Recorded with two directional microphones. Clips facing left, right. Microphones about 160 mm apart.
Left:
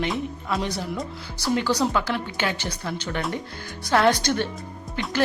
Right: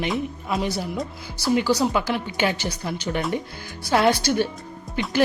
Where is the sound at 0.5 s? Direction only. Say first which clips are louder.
Right 2 dB; 5° right (ahead or behind).